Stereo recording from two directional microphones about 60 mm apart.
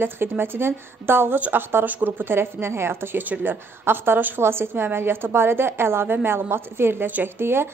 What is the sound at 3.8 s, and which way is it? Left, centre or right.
A woman's voice, right.